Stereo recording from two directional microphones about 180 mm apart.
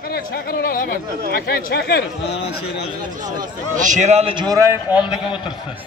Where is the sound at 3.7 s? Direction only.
45° right (ahead or behind); by 4.7 s 25° right (ahead or behind).